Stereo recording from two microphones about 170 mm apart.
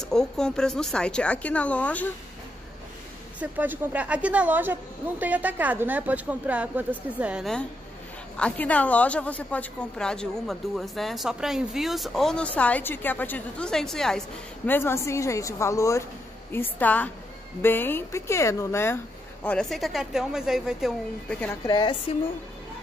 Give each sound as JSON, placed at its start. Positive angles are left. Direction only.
{"t": 0.0, "sound": "a woman's voice", "side_deg": 5}
{"t": 3.3, "sound": "a woman's voice", "side_deg": -10}
{"t": 14.7, "sound": "speech", "side_deg": 15}
{"t": 19.4, "sound": "a woman's voice", "side_deg": 5}
{"t": 21.6, "sound": "speech", "side_deg": 25}